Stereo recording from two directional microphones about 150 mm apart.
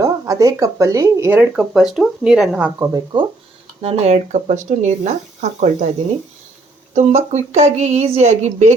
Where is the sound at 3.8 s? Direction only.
45° right (ahead or behind).